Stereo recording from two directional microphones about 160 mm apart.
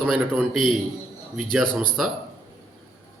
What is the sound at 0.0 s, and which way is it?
A man's voice, centre (ahead or behind).